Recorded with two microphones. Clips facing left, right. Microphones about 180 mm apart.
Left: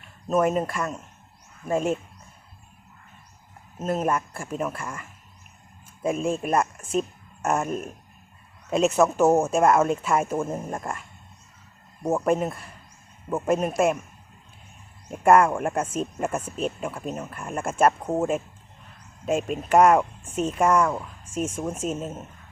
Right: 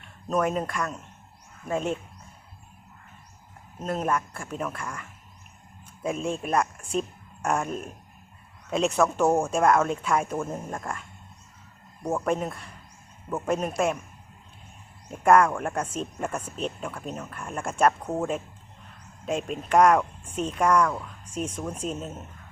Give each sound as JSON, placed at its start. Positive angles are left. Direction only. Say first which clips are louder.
{"t": 0.3, "sound": "speech", "louder": "left 3 dB", "side_deg": 5}
{"t": 3.8, "sound": "speech", "louder": "left 2 dB", "side_deg": 5}
{"t": 10.4, "sound": "speech", "louder": "left 3 dB", "side_deg": 25}
{"t": 10.8, "sound": "speech", "louder": "left 2 dB", "side_deg": 5}
{"t": 12.0, "sound": "speech", "louder": "left 4 dB", "side_deg": 5}
{"t": 15.1, "sound": "speech", "louder": "left 2 dB", "side_deg": 5}